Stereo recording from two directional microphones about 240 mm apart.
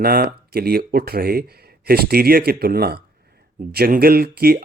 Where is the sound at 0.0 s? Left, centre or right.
Right.